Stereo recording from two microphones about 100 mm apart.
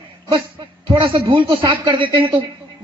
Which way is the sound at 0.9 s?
55° right (ahead or behind).